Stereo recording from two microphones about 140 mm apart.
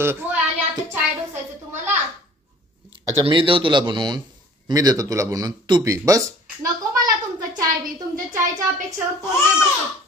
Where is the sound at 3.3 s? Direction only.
35° right (ahead or behind).